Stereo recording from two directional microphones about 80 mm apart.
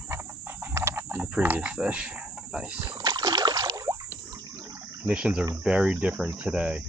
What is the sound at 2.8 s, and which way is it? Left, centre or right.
Rowboat, right.